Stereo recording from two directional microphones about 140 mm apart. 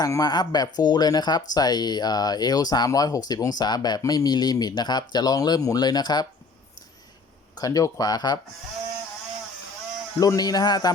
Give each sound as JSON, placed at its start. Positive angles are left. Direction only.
{"t": 0.0, "sound": "speech", "side_deg": 25}
{"t": 7.5, "sound": "speech", "side_deg": 25}
{"t": 10.2, "sound": "speech", "side_deg": 25}